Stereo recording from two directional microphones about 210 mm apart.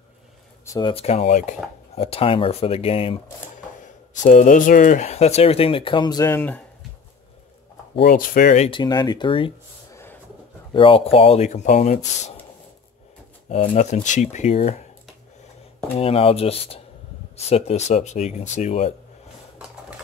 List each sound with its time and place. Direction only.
0.7 s speech: 20° left (ahead or behind)
8.0 s speech: 45° left (ahead or behind)
8.6 s speech: 20° left (ahead or behind)
10.7 s speech: 25° left (ahead or behind)
13.5 s speech: 35° left (ahead or behind)
16.0 s speech: 25° left (ahead or behind)